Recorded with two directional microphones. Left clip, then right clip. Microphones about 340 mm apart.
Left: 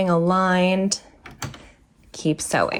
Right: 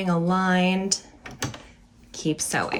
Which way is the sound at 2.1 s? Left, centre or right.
Centre.